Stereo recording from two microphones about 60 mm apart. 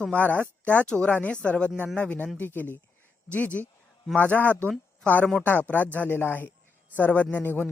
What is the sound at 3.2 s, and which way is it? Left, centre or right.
A man's voice, left.